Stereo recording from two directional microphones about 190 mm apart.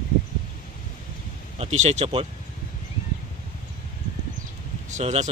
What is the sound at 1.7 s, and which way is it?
Speech, 35° right (ahead or behind).